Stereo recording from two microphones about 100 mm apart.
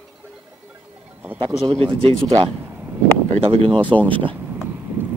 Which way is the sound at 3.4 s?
65° right (ahead or behind).